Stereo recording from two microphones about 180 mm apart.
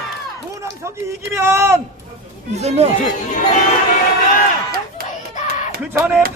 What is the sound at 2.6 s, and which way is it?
Speech, 35° right (ahead or behind).